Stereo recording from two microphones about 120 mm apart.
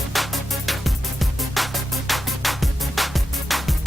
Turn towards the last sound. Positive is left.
turn(degrees=0)  # may be behind; listen again after turning